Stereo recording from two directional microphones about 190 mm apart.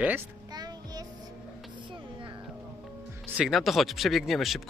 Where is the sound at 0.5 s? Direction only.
20° right (ahead or behind).